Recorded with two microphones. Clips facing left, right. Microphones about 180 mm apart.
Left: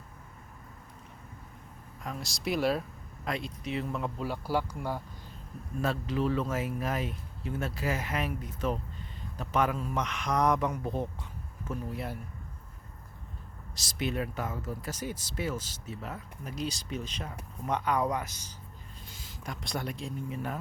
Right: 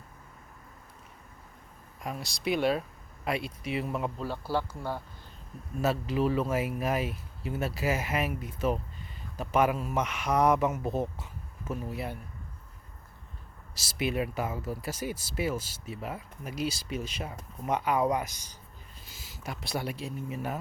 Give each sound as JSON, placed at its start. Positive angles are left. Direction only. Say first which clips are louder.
{"t": 2.2, "sound": "speech", "louder": "right 1 dB", "side_deg": 0}
{"t": 4.2, "sound": "speech", "louder": "even", "side_deg": 10}
{"t": 5.8, "sound": "speech", "louder": "right 3 dB", "side_deg": -10}
{"t": 13.7, "sound": "speech", "louder": "right 2 dB", "side_deg": -10}